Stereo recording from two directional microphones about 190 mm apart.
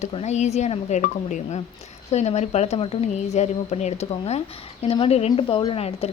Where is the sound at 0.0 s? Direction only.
35° left (ahead or behind).